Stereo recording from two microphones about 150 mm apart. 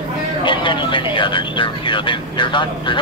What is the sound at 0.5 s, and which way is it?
Speech, 30° left (ahead or behind).